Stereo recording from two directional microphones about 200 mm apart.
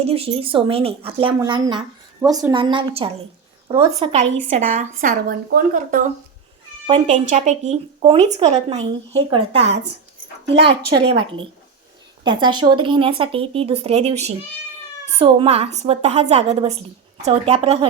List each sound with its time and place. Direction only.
0.0 s a woman's voice: 30° right (ahead or behind)
4.9 s a woman's voice: 45° right (ahead or behind)
7.1 s a woman's voice: 35° right (ahead or behind)
10.7 s a woman's voice: 30° right (ahead or behind)